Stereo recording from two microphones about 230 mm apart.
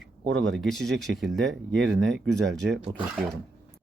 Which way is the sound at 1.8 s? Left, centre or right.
Right.